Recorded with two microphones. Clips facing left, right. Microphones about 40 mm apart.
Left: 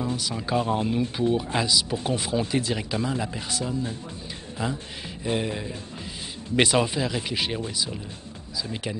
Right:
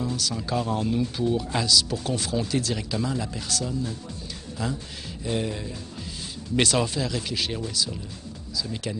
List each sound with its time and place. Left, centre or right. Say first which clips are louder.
0.0 s speech: even; centre